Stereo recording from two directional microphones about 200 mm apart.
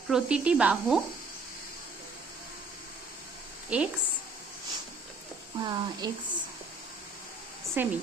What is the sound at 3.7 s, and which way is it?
Speech, 5° right (ahead or behind).